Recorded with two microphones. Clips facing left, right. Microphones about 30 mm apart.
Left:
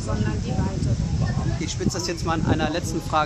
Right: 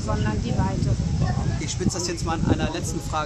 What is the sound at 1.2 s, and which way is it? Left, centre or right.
Speech, centre.